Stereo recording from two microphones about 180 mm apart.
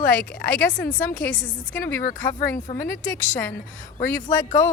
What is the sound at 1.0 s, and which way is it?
A woman's voice, 50° left (ahead or behind).